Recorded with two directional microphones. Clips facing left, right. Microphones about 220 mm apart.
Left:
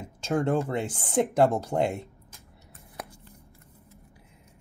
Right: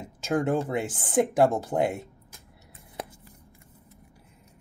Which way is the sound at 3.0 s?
25° right (ahead or behind).